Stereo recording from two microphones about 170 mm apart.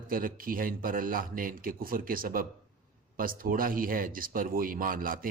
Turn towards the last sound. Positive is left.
turn(degrees=-55)  # may be behind; listen again after turning